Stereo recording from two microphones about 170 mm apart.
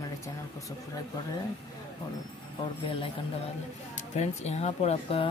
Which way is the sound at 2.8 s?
30° left (ahead or behind).